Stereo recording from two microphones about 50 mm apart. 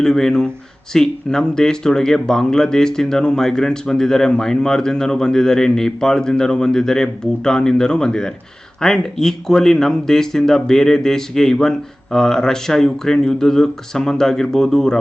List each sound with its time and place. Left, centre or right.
0.0 s speech: centre